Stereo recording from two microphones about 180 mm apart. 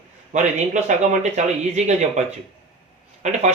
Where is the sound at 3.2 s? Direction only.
40° right (ahead or behind).